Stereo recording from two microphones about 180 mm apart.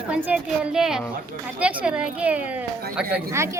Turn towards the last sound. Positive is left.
turn(degrees=-15)  # may be behind; listen again after turning